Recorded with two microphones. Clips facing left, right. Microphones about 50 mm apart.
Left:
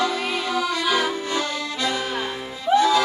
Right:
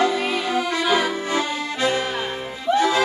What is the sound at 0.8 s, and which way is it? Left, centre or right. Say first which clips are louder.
Accordion: right 2 dB; right.